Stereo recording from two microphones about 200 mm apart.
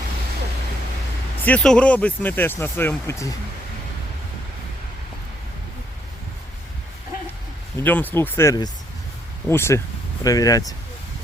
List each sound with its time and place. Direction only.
1.5 s speech: 5° left (ahead or behind)
7.8 s speech: 10° left (ahead or behind)